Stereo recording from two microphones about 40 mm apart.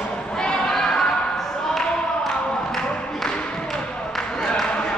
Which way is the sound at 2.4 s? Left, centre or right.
Left.